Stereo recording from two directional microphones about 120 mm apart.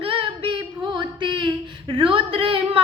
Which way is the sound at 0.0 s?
45° right (ahead or behind).